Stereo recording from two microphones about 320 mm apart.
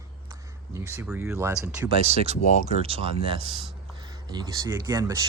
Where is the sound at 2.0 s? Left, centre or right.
Centre.